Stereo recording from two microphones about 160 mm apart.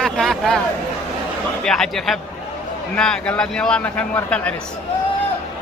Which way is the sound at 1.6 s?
5° left (ahead or behind).